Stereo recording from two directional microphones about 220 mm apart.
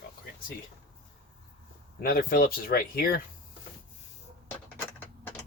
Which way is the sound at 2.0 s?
40° left (ahead or behind).